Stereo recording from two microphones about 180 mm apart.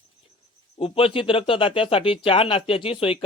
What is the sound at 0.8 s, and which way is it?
Speech, 30° left (ahead or behind).